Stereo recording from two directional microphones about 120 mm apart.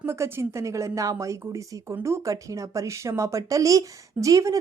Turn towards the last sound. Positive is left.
turn(degrees=-25)  # may be behind; listen again after turning